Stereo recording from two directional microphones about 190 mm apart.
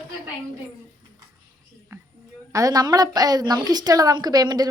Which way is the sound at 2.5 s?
20° right (ahead or behind).